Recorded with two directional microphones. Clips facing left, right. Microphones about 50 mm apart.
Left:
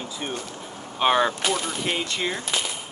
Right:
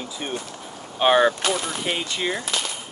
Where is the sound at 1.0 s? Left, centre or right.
Right.